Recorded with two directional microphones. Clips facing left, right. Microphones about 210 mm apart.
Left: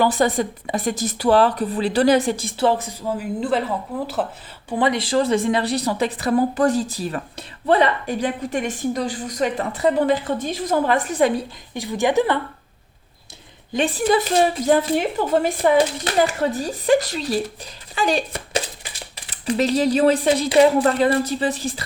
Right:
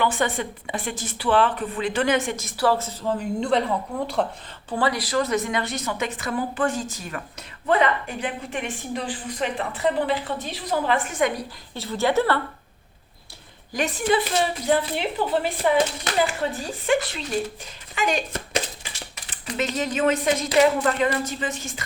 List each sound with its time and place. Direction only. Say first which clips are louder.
0.0 s a woman's voice: left 5 dB; 40° left (ahead or behind); by 4.3 s 5° left (ahead or behind)
4.7 s a woman's voice: left 4 dB; 20° left (ahead or behind)
11.7 s a woman's voice: left 3 dB; 15° left (ahead or behind)
13.7 s a woman's voice: left 4 dB; 30° left (ahead or behind)